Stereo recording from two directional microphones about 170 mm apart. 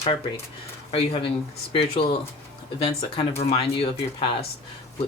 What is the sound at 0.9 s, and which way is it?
Speech, 35° left (ahead or behind).